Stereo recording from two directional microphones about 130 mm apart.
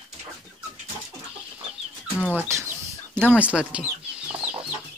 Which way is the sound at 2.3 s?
20° right (ahead or behind).